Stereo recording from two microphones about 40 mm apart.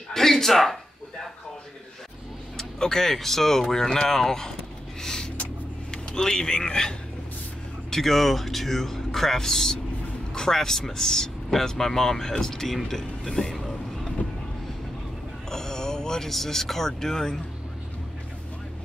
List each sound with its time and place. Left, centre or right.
0.1 s speech: centre
2.5 s speech: centre
5.0 s a sound: centre
5.9 s speech: centre
7.9 s speech: centre
15.5 s a sound: centre
16.3 s speech: centre